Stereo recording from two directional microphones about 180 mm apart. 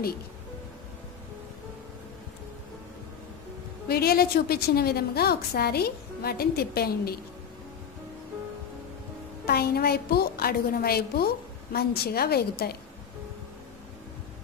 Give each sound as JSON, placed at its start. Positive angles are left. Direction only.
{"t": 3.8, "sound": "a woman's voice", "side_deg": 60}
{"t": 9.5, "sound": "a woman's voice", "side_deg": 60}